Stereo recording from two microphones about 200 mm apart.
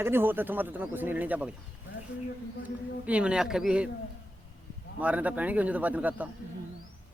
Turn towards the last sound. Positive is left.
turn(degrees=-5)  # may be behind; listen again after turning